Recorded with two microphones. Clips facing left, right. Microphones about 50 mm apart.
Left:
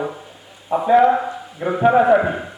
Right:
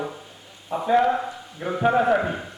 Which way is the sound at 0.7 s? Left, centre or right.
Centre.